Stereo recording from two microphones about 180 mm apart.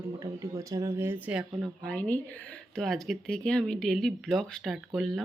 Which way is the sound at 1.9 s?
10° left (ahead or behind).